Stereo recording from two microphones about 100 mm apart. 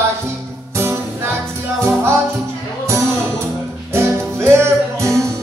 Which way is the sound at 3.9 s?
25° right (ahead or behind).